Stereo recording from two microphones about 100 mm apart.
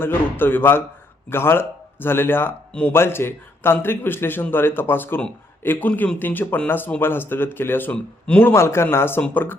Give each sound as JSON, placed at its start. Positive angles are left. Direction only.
{"t": 0.0, "sound": "a man's voice", "side_deg": 20}